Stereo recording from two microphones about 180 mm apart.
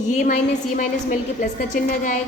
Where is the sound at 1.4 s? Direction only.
45° left (ahead or behind).